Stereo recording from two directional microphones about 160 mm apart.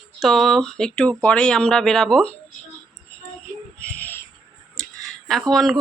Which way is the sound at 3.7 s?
10° left (ahead or behind).